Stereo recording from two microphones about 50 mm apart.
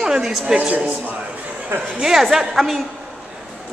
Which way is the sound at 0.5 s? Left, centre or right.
Right.